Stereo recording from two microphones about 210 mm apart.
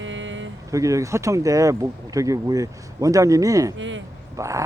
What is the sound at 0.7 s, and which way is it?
Speech, 15° right (ahead or behind).